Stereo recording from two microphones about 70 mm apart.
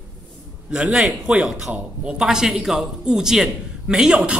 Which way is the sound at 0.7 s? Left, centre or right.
Centre.